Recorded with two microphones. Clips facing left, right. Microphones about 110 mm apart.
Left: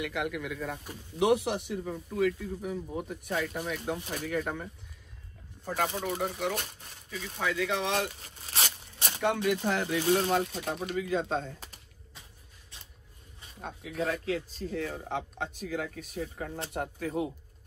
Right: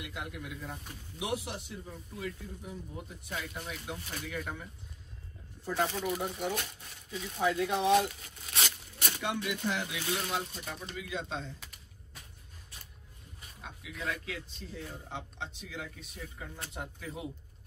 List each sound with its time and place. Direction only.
0.0 s speech: 70° left (ahead or behind); by 4.6 s 55° left (ahead or behind)
6.0 s speech: 60° left (ahead or behind)
7.3 s speech: 75° left (ahead or behind)
8.2 s a sound: 35° left (ahead or behind)
9.2 s speech: 50° left (ahead or behind)
10.4 s speech: 65° left (ahead or behind)
11.0 s speech: 45° left (ahead or behind)
13.6 s speech: 45° left (ahead or behind)
14.7 s speech: 65° left (ahead or behind)